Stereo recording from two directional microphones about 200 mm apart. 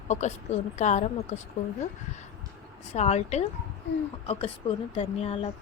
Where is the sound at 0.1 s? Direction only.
35° left (ahead or behind).